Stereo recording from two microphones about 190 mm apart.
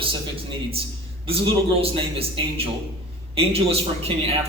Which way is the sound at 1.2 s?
30° right (ahead or behind).